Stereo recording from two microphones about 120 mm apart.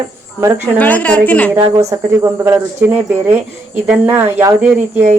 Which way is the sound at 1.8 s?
25° right (ahead or behind).